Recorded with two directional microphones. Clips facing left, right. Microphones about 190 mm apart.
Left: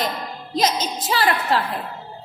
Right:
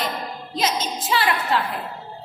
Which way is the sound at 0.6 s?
40° left (ahead or behind).